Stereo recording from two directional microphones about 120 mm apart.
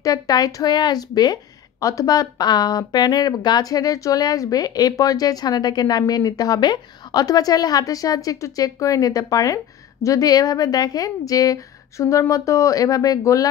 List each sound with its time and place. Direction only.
0.0 s a woman's voice: 30° left (ahead or behind)